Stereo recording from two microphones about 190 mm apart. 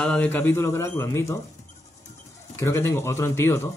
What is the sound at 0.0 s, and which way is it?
Speech, 5° left (ahead or behind).